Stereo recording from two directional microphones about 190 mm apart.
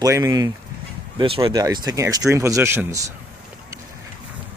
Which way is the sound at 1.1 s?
30° right (ahead or behind).